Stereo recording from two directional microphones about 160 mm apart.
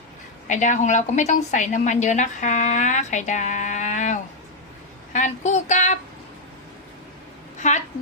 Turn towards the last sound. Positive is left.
turn(degrees=50)  # may be behind; listen again after turning